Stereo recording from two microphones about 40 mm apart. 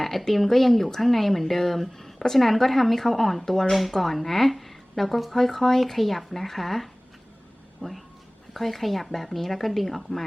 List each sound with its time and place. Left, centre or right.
0.0 s speech: centre